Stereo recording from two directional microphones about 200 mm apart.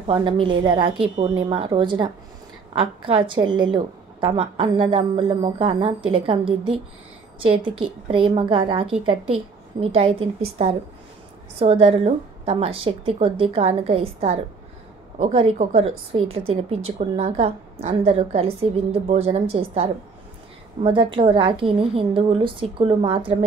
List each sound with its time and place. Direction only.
0.0 s a woman's voice: 25° right (ahead or behind)
7.8 s a woman's voice: 25° right (ahead or behind)